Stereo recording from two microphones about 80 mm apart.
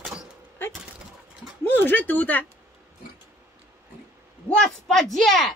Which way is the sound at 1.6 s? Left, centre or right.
Left.